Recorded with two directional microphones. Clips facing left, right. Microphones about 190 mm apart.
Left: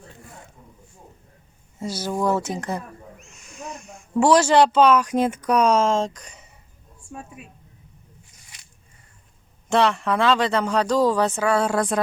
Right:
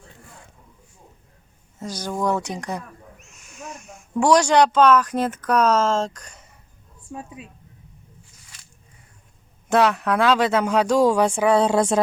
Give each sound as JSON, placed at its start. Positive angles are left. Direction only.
{"t": 1.8, "sound": "a sound", "side_deg": 10}
{"t": 4.1, "sound": "speech", "side_deg": 5}
{"t": 9.6, "sound": "speech", "side_deg": -5}